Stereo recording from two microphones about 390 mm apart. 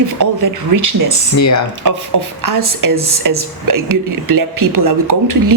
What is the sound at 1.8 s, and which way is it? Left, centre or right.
Speech, right.